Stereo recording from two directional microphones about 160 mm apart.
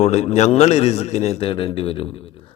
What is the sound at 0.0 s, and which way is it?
A man's voice, 45° left (ahead or behind).